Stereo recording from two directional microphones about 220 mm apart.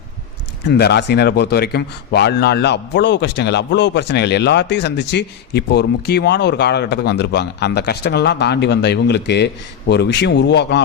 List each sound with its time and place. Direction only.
0.6 s a man's voice: 50° left (ahead or behind)